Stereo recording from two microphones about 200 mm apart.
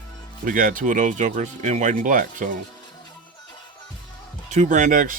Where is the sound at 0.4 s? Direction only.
45° right (ahead or behind).